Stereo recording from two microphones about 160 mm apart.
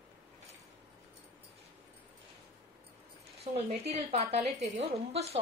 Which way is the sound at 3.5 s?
50° right (ahead or behind).